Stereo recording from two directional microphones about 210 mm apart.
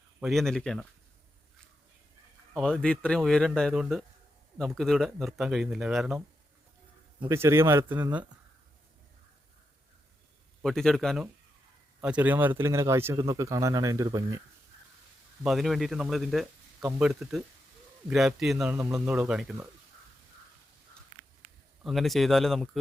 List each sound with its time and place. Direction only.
0.2 s speech: centre (ahead or behind)
2.5 s speech: centre (ahead or behind)
7.2 s speech: 15° right (ahead or behind)
10.6 s speech: centre (ahead or behind); by 14.4 s 15° right (ahead or behind)
15.4 s speech: centre (ahead or behind)
21.8 s speech: centre (ahead or behind)